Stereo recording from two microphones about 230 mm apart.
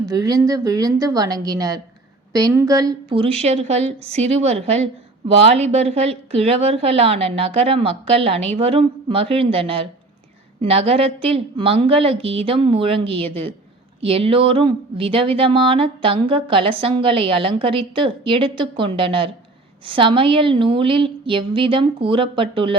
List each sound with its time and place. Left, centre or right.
0.0 s a woman's voice: centre